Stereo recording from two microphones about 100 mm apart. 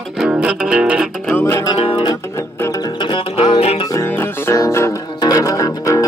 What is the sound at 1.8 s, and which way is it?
Music, 70° left (ahead or behind).